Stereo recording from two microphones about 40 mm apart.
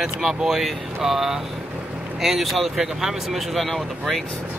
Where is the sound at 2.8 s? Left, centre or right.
Centre.